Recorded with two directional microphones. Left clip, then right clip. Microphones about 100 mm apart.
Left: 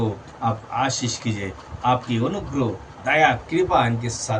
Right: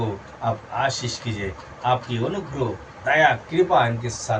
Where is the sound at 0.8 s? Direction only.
20° left (ahead or behind).